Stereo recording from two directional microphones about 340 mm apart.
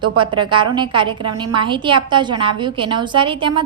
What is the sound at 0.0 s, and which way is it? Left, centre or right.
Speech, right.